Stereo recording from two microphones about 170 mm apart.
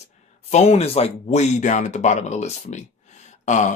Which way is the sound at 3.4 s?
45° left (ahead or behind).